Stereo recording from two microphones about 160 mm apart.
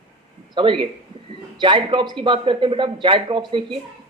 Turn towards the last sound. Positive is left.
turn(degrees=-30)  # may be behind; listen again after turning